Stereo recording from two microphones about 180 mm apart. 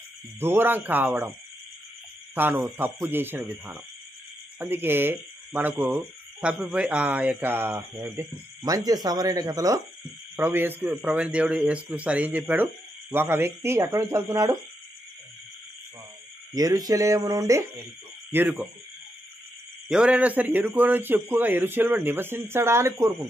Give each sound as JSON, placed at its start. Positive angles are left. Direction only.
{"t": 0.4, "sound": "speech", "side_deg": -10}
{"t": 2.3, "sound": "speech", "side_deg": -10}
{"t": 16.5, "sound": "speech", "side_deg": -20}
{"t": 19.9, "sound": "speech", "side_deg": -5}